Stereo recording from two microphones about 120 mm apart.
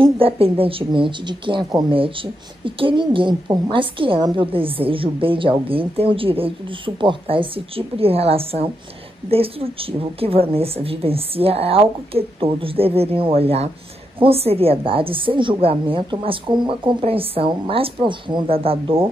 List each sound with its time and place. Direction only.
0.0 s a woman's voice: 50° right (ahead or behind)